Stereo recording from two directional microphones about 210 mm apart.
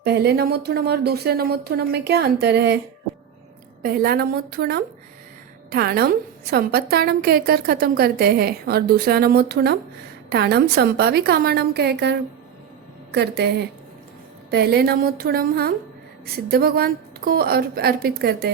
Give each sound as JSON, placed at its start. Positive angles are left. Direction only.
{"t": 0.0, "sound": "a woman's voice", "side_deg": -50}
{"t": 3.8, "sound": "a woman's voice", "side_deg": -45}